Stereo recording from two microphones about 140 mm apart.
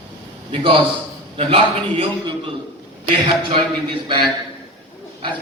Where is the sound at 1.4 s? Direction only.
45° right (ahead or behind).